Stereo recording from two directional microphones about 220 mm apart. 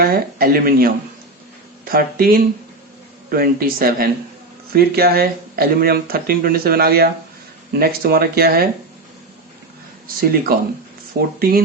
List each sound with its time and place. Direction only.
0.0 s speech: 40° right (ahead or behind)
10.2 s speech: 45° right (ahead or behind)